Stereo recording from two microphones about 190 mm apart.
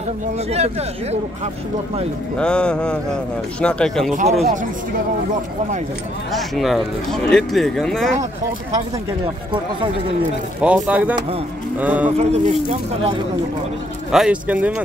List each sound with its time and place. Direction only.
0.5 s speech: 35° right (ahead or behind)
2.3 s speech: 5° left (ahead or behind)
4.1 s speech: 40° right (ahead or behind)
6.3 s speech: centre (ahead or behind)
10.6 s speech: 5° right (ahead or behind)
12.2 s speech: 35° right (ahead or behind)
14.1 s speech: 5° right (ahead or behind)